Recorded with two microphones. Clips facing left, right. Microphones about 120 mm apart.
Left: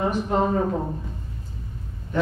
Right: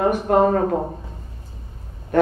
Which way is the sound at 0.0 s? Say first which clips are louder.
Right 6 dB; 55° right (ahead or behind).